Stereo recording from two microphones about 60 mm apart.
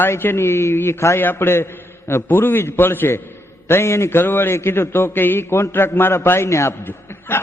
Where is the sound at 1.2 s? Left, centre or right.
Left.